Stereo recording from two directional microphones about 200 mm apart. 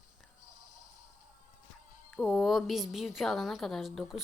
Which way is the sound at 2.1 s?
5° left (ahead or behind).